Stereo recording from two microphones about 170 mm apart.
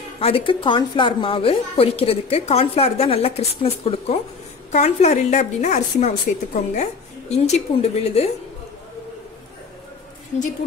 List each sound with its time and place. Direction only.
0.2 s a woman's voice: 30° left (ahead or behind)